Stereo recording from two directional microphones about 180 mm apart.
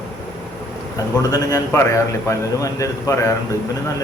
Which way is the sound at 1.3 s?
20° left (ahead or behind).